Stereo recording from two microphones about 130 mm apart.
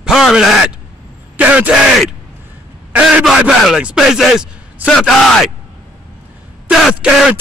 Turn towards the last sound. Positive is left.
turn(degrees=-5)  # may be behind; listen again after turning